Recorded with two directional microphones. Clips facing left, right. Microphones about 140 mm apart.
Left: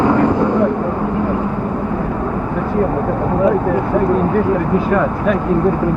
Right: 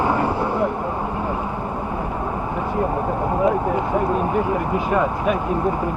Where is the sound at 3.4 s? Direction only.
15° right (ahead or behind).